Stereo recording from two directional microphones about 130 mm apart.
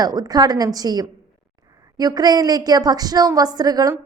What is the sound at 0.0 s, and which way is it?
A woman's voice, 30° right (ahead or behind).